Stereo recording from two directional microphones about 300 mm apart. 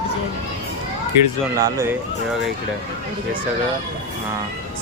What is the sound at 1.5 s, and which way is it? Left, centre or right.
Speech, centre.